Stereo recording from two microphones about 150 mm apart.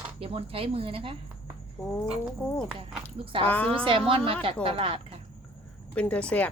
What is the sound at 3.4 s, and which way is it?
Speech, 10° left (ahead or behind).